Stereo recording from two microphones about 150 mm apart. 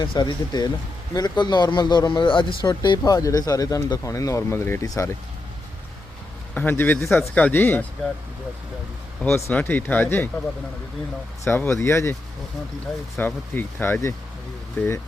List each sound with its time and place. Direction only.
0.0 s speech: 30° left (ahead or behind)
6.5 s speech: 10° left (ahead or behind)
9.2 s speech: 10° left (ahead or behind)
11.4 s speech: 15° left (ahead or behind)
13.1 s speech: 10° left (ahead or behind)